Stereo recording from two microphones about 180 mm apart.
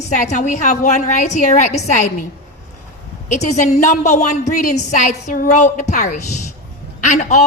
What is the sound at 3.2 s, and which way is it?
A woman's voice, 40° left (ahead or behind).